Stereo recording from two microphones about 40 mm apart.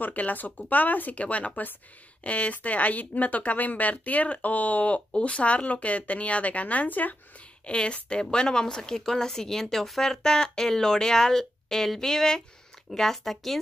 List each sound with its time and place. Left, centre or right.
0.0 s speech: left
7.6 s a woman's voice: left; by 13.6 s centre